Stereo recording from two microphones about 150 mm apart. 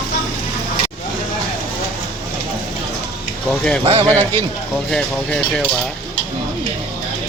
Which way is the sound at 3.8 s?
40° right (ahead or behind).